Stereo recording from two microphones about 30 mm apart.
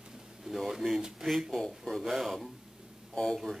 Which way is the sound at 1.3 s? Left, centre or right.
Centre.